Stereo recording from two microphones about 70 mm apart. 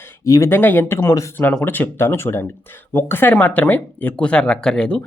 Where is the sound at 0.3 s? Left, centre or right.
Left.